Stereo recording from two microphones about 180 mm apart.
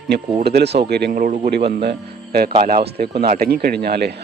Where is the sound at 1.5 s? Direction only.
65° right (ahead or behind).